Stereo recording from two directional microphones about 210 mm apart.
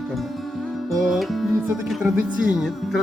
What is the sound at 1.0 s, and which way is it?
Speech, centre (ahead or behind).